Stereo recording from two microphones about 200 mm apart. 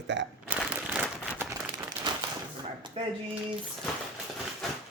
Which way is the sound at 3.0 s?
30° right (ahead or behind).